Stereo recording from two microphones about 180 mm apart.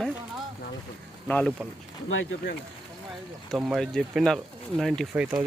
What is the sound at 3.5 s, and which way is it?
Speech, centre (ahead or behind).